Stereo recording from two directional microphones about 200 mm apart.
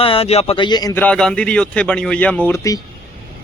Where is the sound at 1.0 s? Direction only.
5° left (ahead or behind).